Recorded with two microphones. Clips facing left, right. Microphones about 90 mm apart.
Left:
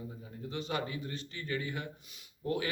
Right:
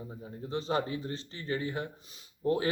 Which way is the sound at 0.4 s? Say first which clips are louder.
Right 5 dB; 35° right (ahead or behind).